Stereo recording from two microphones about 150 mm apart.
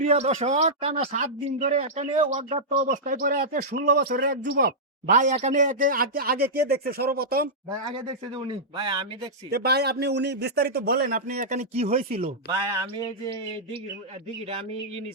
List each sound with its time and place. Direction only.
0.0 s speech: 45° right (ahead or behind)
2.8 s a man's voice: 65° right (ahead or behind); by 7.5 s 85° right
8.4 s speech: 35° right (ahead or behind)
9.5 s a man's voice: 90° right; by 12.3 s 45° right (ahead or behind)